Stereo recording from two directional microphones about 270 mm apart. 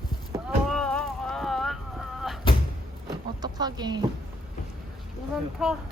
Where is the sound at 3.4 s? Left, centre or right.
Centre.